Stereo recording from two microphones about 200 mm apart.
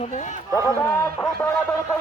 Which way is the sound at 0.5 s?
15° left (ahead or behind).